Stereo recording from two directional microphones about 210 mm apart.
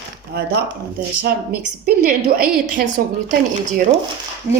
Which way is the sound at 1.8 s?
45° right (ahead or behind).